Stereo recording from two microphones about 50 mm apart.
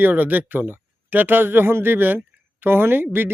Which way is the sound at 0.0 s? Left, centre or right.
Right.